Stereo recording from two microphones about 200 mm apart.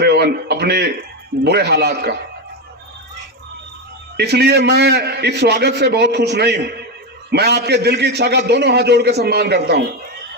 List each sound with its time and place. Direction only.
0.0 s a sound: 55° right (ahead or behind)
1.5 s a man's voice: 55° right (ahead or behind)
4.2 s a man's voice: 55° right (ahead or behind)